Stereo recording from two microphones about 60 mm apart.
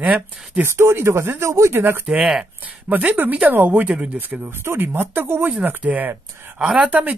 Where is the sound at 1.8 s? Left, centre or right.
Right.